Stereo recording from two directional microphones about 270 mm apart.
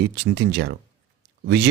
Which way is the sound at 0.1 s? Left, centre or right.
Right.